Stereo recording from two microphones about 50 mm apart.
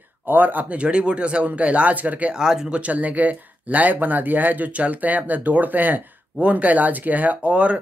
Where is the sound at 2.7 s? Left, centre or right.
Right.